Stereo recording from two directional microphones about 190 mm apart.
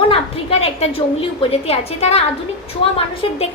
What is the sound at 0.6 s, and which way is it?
A woman's voice, 30° left (ahead or behind).